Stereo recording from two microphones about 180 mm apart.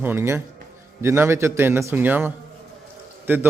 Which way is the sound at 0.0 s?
15° right (ahead or behind).